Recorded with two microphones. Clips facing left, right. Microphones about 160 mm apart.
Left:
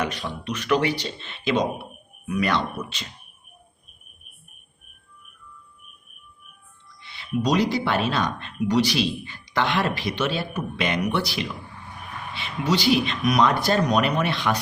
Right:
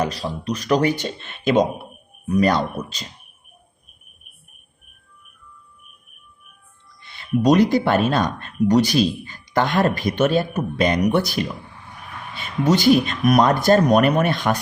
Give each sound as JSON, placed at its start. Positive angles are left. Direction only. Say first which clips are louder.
{"t": 0.0, "sound": "speech", "louder": "right 4 dB", "side_deg": -35}
{"t": 2.2, "sound": "speech", "louder": "right 6 dB", "side_deg": -40}
{"t": 7.0, "sound": "speech", "louder": "right 6 dB", "side_deg": -50}